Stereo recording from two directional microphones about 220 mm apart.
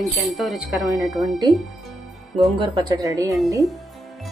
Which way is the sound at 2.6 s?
20° right (ahead or behind).